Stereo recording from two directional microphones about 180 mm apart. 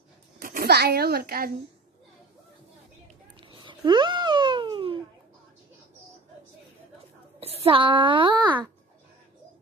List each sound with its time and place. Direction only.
0.4 s a child's voice: 50° right (ahead or behind)
3.3 s a sound: 30° right (ahead or behind)
7.3 s a child's voice: 35° right (ahead or behind)